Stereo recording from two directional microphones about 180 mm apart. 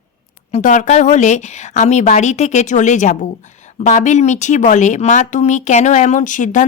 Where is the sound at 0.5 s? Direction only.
45° left (ahead or behind).